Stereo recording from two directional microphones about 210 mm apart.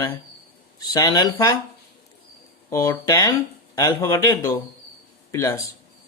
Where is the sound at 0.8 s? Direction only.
20° left (ahead or behind).